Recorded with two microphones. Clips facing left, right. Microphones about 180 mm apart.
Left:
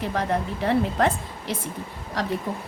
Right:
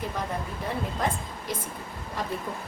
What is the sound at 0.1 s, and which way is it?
A woman's voice, 75° left (ahead or behind).